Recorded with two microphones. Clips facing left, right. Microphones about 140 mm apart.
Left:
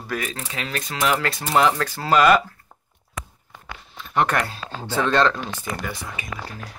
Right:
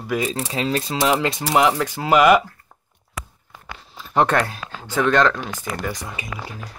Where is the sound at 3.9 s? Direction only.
30° right (ahead or behind).